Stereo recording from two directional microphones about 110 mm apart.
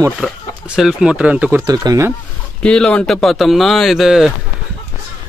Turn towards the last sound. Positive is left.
turn(degrees=0)  # may be behind; listen again after turning